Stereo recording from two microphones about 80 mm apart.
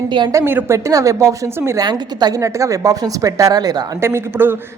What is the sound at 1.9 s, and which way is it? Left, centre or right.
Speech, right.